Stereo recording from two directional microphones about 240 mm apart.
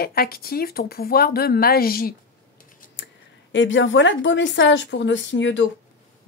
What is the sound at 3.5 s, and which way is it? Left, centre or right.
Speech, left.